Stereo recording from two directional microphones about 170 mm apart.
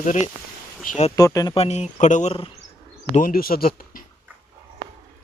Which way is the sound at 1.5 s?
40° left (ahead or behind).